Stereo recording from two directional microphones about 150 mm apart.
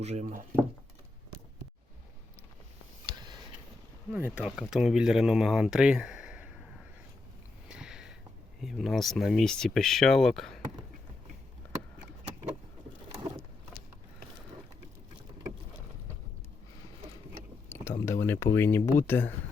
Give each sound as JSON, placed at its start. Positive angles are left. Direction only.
{"t": 0.0, "sound": "speech", "side_deg": -50}
{"t": 3.1, "sound": "a sound", "side_deg": -30}
{"t": 4.1, "sound": "speech", "side_deg": -10}
{"t": 7.7, "sound": "a sound", "side_deg": -5}
{"t": 8.6, "sound": "speech", "side_deg": 0}
{"t": 17.7, "sound": "speech", "side_deg": 15}